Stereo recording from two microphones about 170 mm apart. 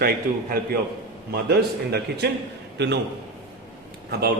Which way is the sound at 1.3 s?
70° right (ahead or behind).